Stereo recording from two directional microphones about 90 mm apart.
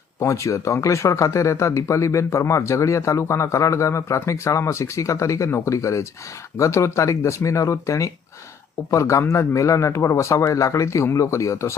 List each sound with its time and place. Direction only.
0.2 s speech: 35° left (ahead or behind)